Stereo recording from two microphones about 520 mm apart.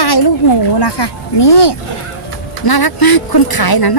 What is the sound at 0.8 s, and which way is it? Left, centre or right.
A woman's voice, left.